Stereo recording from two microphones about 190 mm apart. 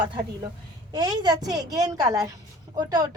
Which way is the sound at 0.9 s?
20° right (ahead or behind).